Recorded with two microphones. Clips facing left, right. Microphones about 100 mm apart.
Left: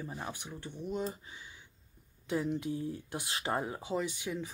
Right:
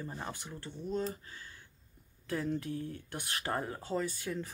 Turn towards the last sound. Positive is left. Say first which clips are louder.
# even
turn(degrees=15)  # may be behind; listen again after turning